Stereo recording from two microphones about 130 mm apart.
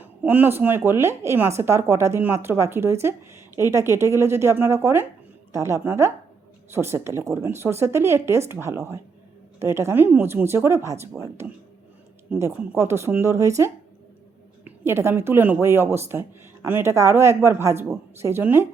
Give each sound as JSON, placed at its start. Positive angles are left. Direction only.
{"t": 0.0, "sound": "speech", "side_deg": -15}